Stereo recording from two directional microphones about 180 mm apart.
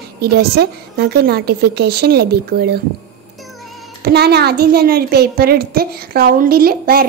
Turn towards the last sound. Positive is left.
turn(degrees=-55)  # may be behind; listen again after turning